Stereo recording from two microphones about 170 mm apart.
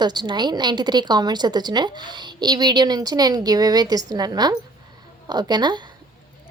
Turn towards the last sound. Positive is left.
turn(degrees=-25)  # may be behind; listen again after turning